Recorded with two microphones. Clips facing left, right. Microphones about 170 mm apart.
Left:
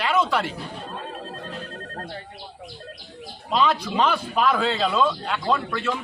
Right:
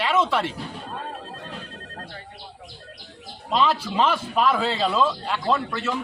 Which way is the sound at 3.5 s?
Centre (ahead or behind).